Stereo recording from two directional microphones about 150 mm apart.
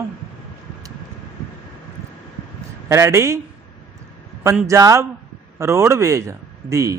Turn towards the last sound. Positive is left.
turn(degrees=-20)  # may be behind; listen again after turning